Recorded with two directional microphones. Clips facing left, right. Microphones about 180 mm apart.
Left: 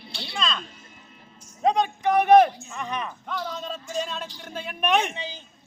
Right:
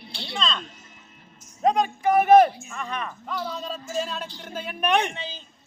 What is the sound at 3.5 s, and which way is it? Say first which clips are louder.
Speech: right 1 dB; centre (ahead or behind).